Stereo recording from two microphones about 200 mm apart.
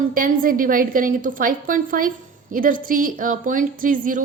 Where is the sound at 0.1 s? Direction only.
45° right (ahead or behind).